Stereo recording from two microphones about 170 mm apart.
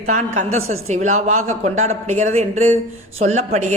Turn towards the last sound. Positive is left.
turn(degrees=-40)  # may be behind; listen again after turning